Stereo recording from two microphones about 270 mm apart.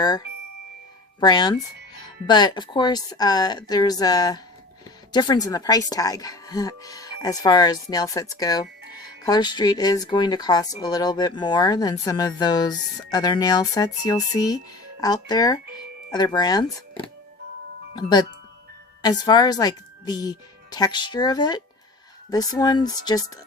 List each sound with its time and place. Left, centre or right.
1.2 s speech: centre
17.9 s speech: centre